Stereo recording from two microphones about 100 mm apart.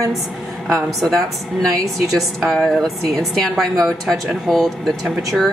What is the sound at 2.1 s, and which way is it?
Speech, 5° left (ahead or behind).